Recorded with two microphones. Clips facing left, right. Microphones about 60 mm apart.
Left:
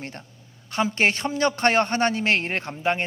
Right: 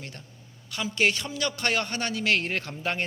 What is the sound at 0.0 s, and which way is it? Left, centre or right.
A woman's voice, left.